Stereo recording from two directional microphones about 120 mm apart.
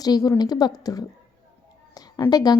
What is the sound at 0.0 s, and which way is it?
Speech, 30° left (ahead or behind).